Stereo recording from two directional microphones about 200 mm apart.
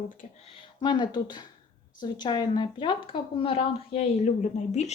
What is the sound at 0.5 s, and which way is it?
A woman's voice, 25° left (ahead or behind).